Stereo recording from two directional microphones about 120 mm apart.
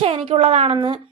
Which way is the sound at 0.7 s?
45° right (ahead or behind).